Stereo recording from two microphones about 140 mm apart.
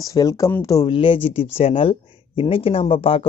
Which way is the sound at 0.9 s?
35° left (ahead or behind).